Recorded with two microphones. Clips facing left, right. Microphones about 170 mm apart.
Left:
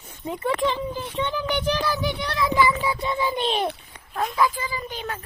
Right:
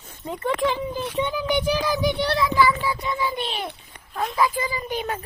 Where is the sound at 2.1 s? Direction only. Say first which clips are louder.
Right 6 dB; 30° right (ahead or behind).